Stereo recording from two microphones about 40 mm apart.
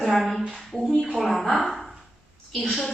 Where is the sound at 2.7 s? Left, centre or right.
Centre.